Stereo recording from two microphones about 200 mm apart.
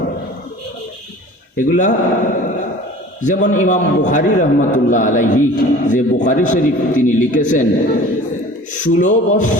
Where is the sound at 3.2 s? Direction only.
40° left (ahead or behind).